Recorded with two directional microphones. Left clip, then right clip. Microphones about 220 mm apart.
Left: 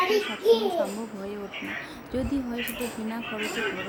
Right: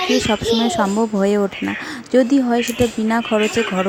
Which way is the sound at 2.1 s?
35° right (ahead or behind).